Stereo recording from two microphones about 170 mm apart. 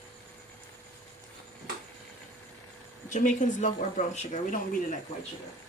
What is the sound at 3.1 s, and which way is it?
Speech, 45° left (ahead or behind).